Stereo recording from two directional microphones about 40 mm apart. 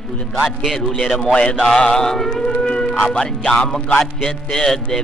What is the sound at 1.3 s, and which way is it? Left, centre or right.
Speech, left.